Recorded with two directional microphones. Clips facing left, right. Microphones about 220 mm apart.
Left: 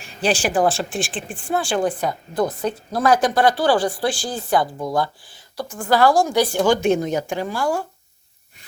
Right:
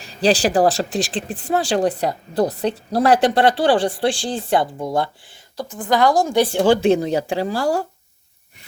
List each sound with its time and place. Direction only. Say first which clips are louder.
0.0 s speech: right 4 dB; 35° right (ahead or behind)
5.9 s speech: even; 20° right (ahead or behind); by 7.9 s 35° right (ahead or behind)